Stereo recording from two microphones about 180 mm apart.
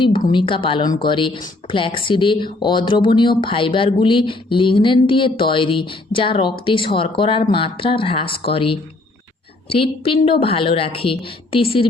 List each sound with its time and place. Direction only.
0.0 s a woman's voice: 25° left (ahead or behind)